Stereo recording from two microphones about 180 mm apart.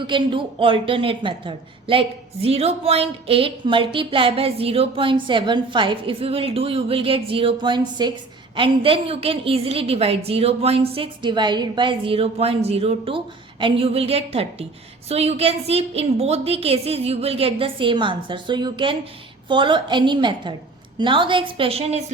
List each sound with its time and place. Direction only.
0.0 s a woman's voice: 25° right (ahead or behind)